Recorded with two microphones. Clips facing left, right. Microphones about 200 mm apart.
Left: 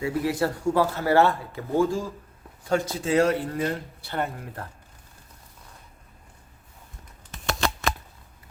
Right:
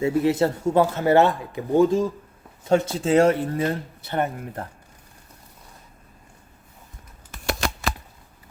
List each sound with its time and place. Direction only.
0.0 s speech: 25° right (ahead or behind)